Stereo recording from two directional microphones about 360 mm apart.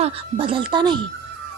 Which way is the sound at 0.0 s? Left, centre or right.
Centre.